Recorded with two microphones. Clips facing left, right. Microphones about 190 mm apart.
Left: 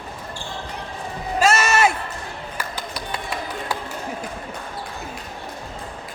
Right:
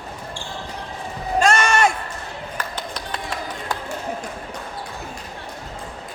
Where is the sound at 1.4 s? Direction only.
5° left (ahead or behind).